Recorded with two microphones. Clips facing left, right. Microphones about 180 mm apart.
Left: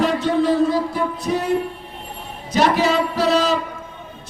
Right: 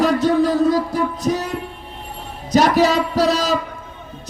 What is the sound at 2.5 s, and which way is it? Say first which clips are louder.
Speech: right 2 dB; 40° right (ahead or behind).